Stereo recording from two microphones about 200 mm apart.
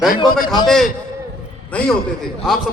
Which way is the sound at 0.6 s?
Centre (ahead or behind).